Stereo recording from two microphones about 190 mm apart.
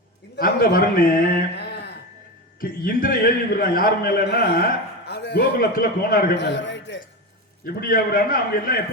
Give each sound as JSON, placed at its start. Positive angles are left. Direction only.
{"t": 0.3, "sound": "a man's voice", "side_deg": 50}
{"t": 7.6, "sound": "a man's voice", "side_deg": 50}